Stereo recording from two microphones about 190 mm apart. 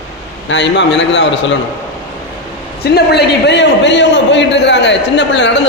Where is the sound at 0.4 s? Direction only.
70° left (ahead or behind).